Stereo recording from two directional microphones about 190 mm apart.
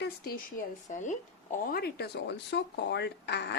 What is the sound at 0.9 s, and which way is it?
Speech, 40° left (ahead or behind).